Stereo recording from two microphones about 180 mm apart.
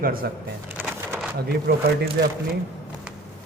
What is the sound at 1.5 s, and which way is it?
Speech, 60° right (ahead or behind).